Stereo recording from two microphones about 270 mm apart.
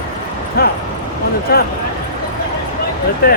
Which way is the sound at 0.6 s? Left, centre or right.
Left.